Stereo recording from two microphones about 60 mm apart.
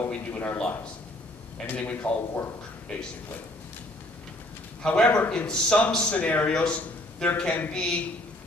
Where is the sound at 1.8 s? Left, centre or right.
Left.